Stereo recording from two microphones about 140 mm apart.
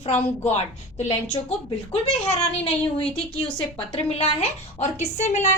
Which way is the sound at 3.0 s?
10° left (ahead or behind).